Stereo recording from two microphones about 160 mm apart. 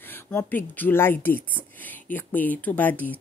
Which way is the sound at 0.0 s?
10° left (ahead or behind).